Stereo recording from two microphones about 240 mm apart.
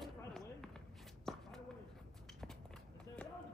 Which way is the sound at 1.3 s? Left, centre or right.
Centre.